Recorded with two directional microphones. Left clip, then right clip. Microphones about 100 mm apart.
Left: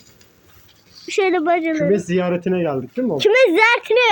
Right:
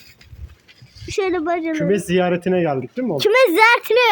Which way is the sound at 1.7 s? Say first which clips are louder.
Left 1 dB; 75° right (ahead or behind).